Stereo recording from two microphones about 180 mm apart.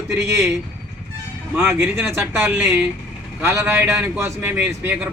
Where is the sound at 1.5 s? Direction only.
10° right (ahead or behind).